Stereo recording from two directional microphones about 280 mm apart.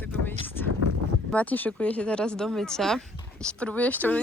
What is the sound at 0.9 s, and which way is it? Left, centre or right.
Boat, left.